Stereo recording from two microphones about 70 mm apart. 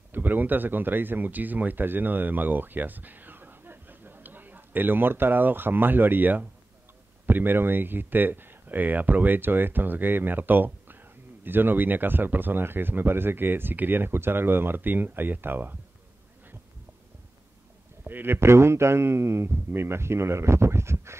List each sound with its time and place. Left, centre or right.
0.1 s speech: right
18.0 s speech: right